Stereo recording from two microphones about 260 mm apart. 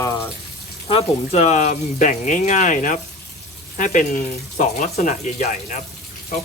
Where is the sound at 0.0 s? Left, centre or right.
Centre.